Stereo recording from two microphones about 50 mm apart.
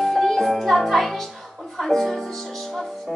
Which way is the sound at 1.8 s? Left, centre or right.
Centre.